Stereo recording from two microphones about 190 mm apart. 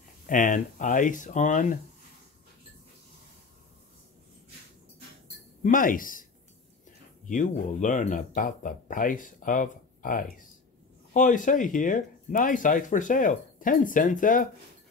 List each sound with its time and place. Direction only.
0.3 s speech: 45° left (ahead or behind)
5.6 s speech: 45° left (ahead or behind)
7.2 s speech: 40° left (ahead or behind)